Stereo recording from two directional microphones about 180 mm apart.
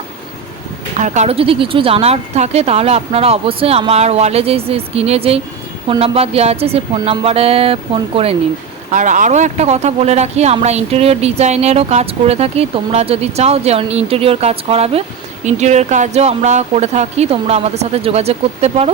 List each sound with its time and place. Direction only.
0.9 s speech: 40° right (ahead or behind)
8.9 s speech: 45° right (ahead or behind)